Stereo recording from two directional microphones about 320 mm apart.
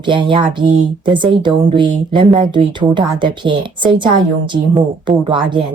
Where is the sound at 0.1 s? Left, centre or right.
Centre.